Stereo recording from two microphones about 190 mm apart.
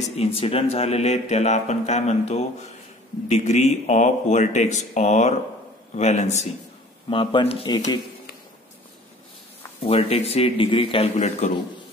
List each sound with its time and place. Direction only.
0.2 s speech: 30° left (ahead or behind)
9.8 s speech: 30° left (ahead or behind)